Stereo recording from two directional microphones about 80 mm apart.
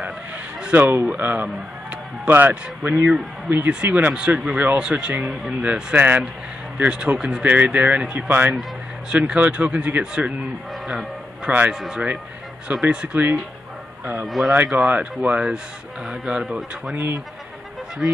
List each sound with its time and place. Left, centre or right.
0.6 s a sound: centre
1.0 s speech: right
7.4 s speech: centre
9.1 s speech: centre
11.4 s speech: centre
11.7 s speech: centre
14.2 s speech: centre
14.5 s speech: centre
18.0 s speech: centre